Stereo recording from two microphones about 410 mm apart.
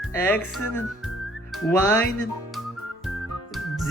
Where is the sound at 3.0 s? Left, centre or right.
Centre.